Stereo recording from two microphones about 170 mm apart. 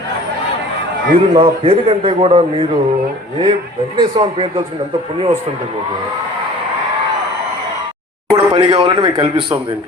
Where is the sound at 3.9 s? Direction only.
30° right (ahead or behind).